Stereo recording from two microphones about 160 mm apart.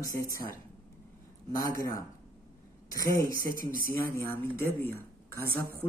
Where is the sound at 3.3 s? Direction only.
65° right (ahead or behind).